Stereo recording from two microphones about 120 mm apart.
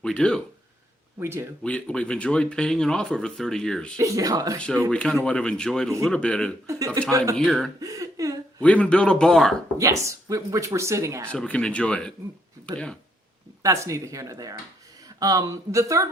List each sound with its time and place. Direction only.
0.0 s speech: 5° left (ahead or behind)
1.2 s speech: 20° right (ahead or behind)
1.6 s speech: 10° left (ahead or behind)
3.9 s speech: 30° right (ahead or behind)
4.9 s speech: 10° left (ahead or behind)
6.7 s speech: 25° right (ahead or behind)
7.3 s speech: 5° left (ahead or behind)
7.8 s a sound: 30° right (ahead or behind)
8.6 s speech: 10° left (ahead or behind)
9.7 s speech: 25° right (ahead or behind)
11.3 s speech: 10° left (ahead or behind)
13.6 s speech: 25° right (ahead or behind)